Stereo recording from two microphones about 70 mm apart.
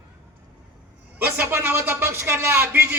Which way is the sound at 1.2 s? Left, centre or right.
Right.